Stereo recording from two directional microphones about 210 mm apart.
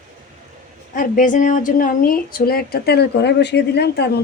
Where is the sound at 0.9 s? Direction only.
40° left (ahead or behind).